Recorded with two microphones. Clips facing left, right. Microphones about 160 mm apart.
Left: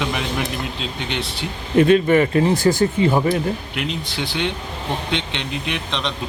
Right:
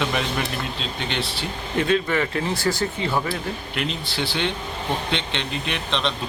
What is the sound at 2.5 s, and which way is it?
Speech, 45° left (ahead or behind).